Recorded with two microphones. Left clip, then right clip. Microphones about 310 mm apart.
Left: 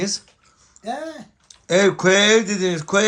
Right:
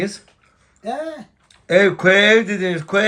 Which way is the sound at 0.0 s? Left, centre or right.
Centre.